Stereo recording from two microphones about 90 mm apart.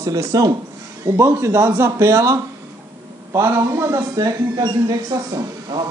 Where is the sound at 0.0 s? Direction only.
40° right (ahead or behind).